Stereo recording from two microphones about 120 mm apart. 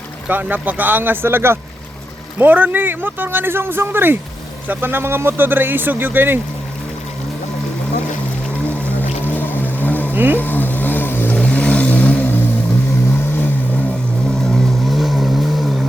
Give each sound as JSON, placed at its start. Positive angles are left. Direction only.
{"t": 0.3, "sound": "speech", "side_deg": -15}
{"t": 9.2, "sound": "vehicle", "side_deg": 15}
{"t": 10.1, "sound": "a sound", "side_deg": -15}
{"t": 10.3, "sound": "vehicle", "side_deg": 15}
{"t": 14.3, "sound": "vehicle", "side_deg": 5}